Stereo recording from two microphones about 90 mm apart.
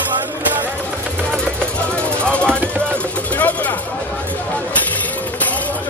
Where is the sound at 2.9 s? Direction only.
15° left (ahead or behind).